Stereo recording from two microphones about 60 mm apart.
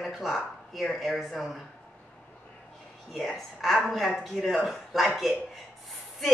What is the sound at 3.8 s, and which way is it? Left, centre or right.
A man's voice, centre.